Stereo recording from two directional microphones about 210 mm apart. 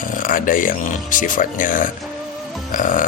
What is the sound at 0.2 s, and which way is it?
Speech, 40° left (ahead or behind).